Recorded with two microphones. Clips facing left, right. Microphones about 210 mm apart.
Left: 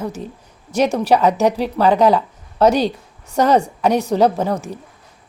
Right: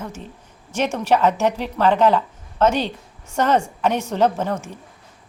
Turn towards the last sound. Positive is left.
turn(degrees=35)  # may be behind; listen again after turning